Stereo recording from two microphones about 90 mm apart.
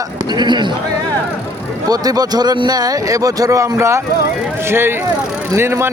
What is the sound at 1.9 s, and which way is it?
A man's voice, 45° right (ahead or behind).